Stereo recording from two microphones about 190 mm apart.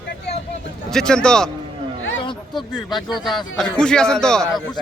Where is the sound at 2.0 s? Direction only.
90° left.